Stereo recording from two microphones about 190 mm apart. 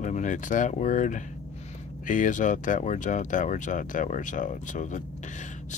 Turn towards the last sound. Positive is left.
turn(degrees=40)  # may be behind; listen again after turning